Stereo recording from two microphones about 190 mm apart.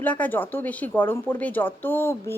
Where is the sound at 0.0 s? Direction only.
10° left (ahead or behind).